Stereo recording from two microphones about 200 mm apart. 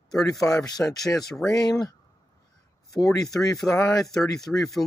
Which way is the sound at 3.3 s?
15° left (ahead or behind).